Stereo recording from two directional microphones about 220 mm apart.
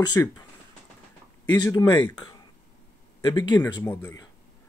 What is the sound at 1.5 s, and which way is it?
Speech, 15° left (ahead or behind).